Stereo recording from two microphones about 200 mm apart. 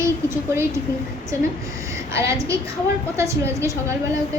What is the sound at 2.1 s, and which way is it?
A woman's voice, 15° right (ahead or behind).